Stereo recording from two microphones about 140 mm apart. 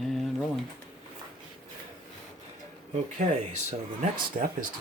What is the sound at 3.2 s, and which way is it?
Speech, 60° right (ahead or behind).